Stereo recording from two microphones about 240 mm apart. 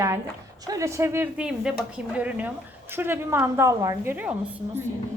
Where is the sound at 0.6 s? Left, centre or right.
Centre.